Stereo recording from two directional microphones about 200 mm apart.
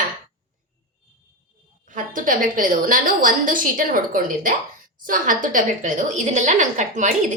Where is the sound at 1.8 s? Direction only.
40° right (ahead or behind).